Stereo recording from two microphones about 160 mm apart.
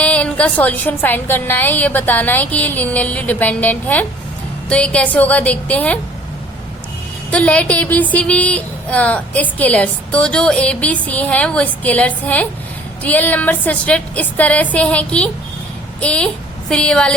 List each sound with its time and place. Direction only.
0.0 s a woman's voice: 10° left (ahead or behind)
7.3 s a woman's voice: 10° left (ahead or behind)